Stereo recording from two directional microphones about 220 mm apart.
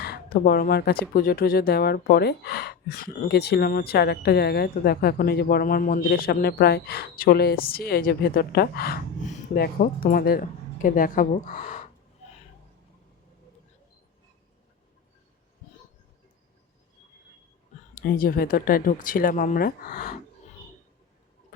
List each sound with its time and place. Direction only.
0.0 s speech: 45° left (ahead or behind)
17.9 s speech: 40° left (ahead or behind)